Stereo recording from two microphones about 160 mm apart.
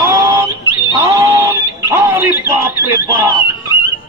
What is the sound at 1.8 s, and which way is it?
Speech, 15° right (ahead or behind).